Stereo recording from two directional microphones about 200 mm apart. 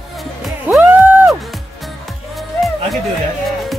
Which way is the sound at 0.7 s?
10° right (ahead or behind).